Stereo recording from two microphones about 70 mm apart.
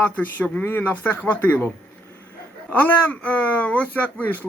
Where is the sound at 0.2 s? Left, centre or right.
Left.